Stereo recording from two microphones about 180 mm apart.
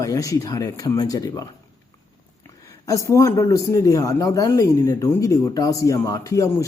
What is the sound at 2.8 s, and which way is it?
A man's voice, 15° left (ahead or behind).